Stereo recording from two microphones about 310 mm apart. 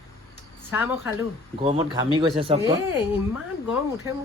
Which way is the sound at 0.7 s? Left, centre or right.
Centre.